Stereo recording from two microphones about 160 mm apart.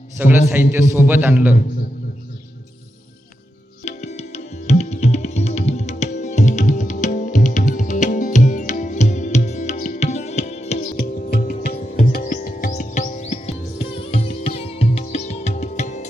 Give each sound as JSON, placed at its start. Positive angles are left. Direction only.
{"t": 0.2, "sound": "a man's voice", "side_deg": -10}
{"t": 3.8, "sound": "music", "side_deg": 45}
{"t": 10.9, "sound": "music", "side_deg": 75}